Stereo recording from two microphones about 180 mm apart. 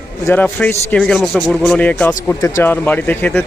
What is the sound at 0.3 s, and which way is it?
Speech, 10° left (ahead or behind).